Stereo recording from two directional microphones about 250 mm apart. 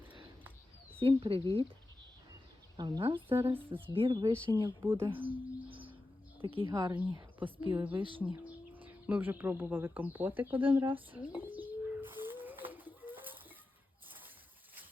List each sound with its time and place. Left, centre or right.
0.9 s a woman's voice: right
2.7 s a woman's voice: centre
5.6 s bird: right
6.4 s a woman's voice: right
7.7 s speech: centre
11.3 s bird: centre
12.7 s a sound: centre